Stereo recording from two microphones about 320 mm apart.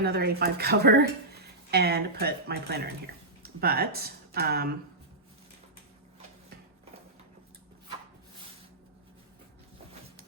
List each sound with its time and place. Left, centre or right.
0.0 s speech: right